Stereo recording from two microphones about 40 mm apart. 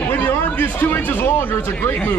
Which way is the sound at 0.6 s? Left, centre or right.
Left.